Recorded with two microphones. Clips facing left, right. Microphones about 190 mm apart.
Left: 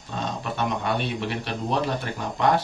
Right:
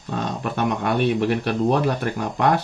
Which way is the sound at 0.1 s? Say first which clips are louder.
Right 4 dB; 55° right (ahead or behind).